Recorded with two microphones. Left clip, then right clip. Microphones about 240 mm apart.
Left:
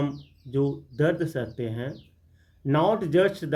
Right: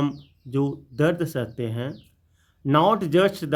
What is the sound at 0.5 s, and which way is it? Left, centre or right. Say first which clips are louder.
Speech: right 1 dB; right.